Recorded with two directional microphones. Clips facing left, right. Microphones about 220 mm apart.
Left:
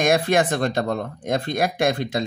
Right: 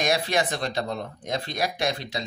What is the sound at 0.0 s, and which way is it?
A man's voice, 50° left (ahead or behind).